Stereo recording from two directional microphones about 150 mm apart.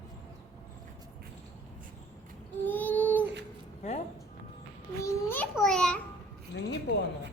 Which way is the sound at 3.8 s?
50° left (ahead or behind).